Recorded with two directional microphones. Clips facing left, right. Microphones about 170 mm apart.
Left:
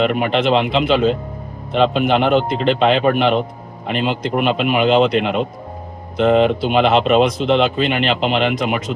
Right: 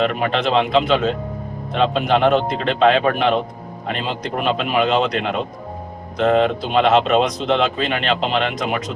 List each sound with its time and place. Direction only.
0.0 s speech: 5° left (ahead or behind)